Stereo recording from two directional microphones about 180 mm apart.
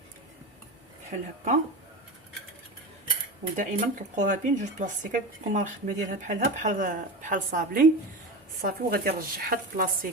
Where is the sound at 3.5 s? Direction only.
45° right (ahead or behind).